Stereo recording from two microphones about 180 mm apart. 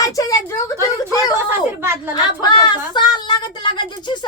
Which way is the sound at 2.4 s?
25° left (ahead or behind).